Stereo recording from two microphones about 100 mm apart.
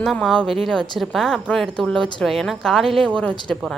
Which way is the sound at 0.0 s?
Centre (ahead or behind).